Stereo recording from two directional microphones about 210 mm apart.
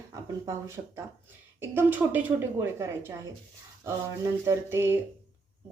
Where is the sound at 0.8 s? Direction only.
25° right (ahead or behind).